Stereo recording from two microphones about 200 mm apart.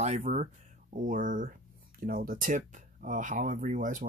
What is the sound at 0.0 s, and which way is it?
Speech, 35° right (ahead or behind).